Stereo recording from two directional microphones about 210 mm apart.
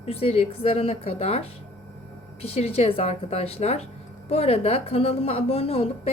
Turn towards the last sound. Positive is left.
turn(degrees=30)  # may be behind; listen again after turning